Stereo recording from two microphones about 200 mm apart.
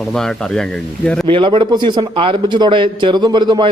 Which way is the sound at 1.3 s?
25° right (ahead or behind).